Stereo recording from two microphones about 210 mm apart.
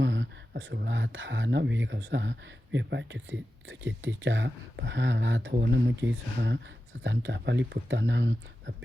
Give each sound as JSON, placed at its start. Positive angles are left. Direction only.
{"t": 0.0, "sound": "speech", "side_deg": -60}